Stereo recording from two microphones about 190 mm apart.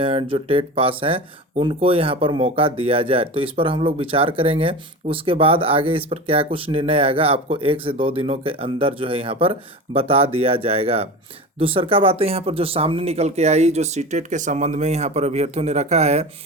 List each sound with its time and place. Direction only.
0.0 s speech: 30° right (ahead or behind)